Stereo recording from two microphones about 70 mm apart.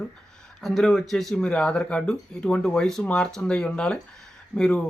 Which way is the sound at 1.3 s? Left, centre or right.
Centre.